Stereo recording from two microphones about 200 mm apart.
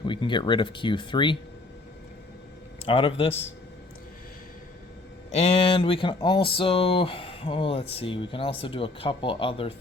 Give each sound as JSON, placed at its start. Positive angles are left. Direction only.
{"t": 0.0, "sound": "speech", "side_deg": 25}
{"t": 2.8, "sound": "speech", "side_deg": 25}
{"t": 5.3, "sound": "speech", "side_deg": 30}